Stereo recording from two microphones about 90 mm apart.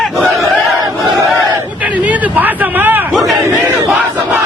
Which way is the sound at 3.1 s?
Centre (ahead or behind).